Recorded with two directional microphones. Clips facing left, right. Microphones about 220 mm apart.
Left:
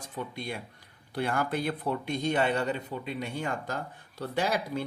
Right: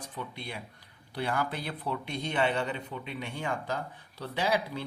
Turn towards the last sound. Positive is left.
turn(degrees=45)  # may be behind; listen again after turning